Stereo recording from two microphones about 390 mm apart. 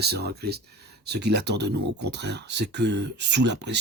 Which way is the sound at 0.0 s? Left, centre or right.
Right.